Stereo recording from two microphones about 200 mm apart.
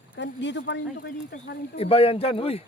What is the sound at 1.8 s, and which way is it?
Speech, 30° left (ahead or behind).